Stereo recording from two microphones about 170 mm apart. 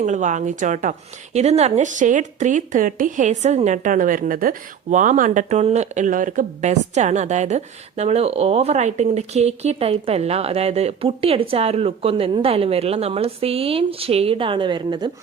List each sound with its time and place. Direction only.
0.0 s a woman's voice: 45° right (ahead or behind); by 15.1 s 25° right (ahead or behind)